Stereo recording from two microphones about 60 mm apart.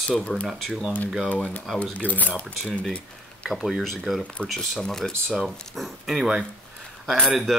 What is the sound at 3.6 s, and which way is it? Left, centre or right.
Speech, centre.